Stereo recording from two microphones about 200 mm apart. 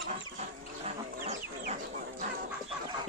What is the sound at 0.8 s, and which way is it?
Livestock, 35° right (ahead or behind).